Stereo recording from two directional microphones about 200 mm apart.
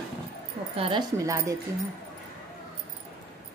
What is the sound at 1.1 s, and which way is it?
Speech, 15° right (ahead or behind).